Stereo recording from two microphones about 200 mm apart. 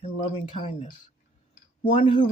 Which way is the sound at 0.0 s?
30° left (ahead or behind).